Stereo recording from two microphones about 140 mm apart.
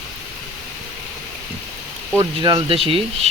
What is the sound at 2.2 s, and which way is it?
Speech, 30° right (ahead or behind).